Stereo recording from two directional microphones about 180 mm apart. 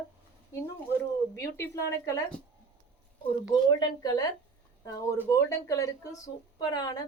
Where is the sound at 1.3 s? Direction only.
15° left (ahead or behind).